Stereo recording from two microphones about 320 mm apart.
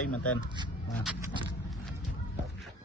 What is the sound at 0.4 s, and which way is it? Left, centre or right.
Speech, centre.